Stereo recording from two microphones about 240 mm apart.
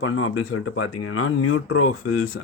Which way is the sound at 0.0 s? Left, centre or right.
Left.